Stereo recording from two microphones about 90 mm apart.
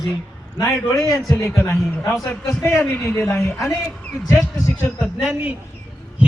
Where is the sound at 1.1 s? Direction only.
Centre (ahead or behind).